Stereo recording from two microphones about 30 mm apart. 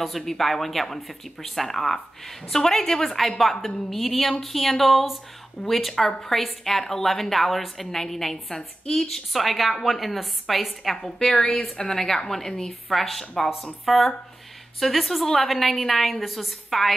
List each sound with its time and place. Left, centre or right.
0.2 s a woman's voice: centre
11.0 s a woman's voice: left
11.3 s a woman's voice: left
11.9 s speech: centre
12.9 s a woman's voice: centre